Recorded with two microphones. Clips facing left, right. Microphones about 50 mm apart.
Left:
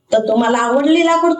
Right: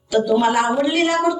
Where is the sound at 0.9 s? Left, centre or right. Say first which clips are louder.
Left 6 dB; centre.